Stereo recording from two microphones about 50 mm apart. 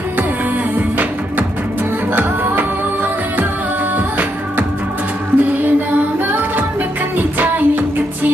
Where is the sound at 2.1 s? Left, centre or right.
Right.